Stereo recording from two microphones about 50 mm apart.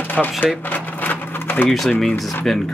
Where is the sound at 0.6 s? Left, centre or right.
Left.